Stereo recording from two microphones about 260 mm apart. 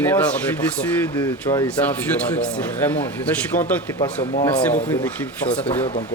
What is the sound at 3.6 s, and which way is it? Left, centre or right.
Speech, left.